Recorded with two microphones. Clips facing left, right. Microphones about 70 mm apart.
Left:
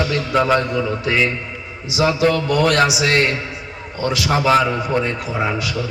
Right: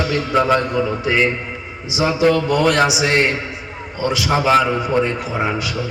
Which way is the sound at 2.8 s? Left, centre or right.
Right.